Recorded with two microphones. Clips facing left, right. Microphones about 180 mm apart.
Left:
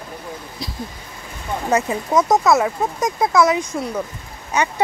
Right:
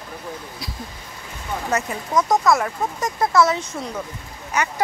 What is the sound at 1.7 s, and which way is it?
Speech, 25° left (ahead or behind).